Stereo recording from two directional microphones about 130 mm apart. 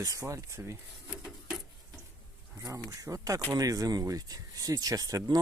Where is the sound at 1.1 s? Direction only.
5° right (ahead or behind).